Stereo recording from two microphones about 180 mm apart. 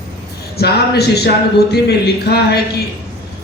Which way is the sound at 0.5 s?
65° left (ahead or behind).